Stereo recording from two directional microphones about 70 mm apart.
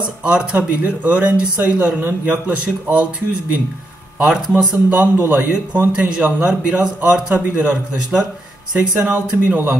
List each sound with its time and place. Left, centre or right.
0.0 s a man's voice: centre
5.1 s a man's voice: right
5.5 s a man's voice: centre